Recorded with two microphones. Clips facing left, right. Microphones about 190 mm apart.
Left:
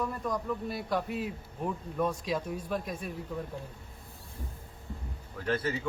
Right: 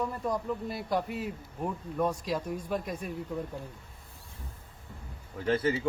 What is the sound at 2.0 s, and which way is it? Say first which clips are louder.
Speech: right 1 dB; 10° right (ahead or behind).